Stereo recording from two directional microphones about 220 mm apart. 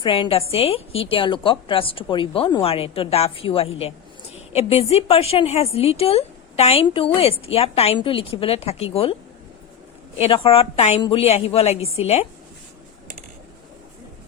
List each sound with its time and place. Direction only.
0.0 s a woman's voice: 25° left (ahead or behind)
10.2 s a woman's voice: 25° left (ahead or behind)